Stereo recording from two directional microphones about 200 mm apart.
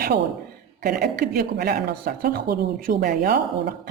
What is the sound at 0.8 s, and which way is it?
Speech, 50° right (ahead or behind).